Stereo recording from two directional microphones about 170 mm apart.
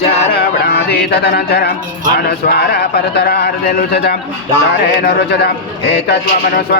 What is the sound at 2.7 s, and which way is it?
A man's voice, 70° left (ahead or behind).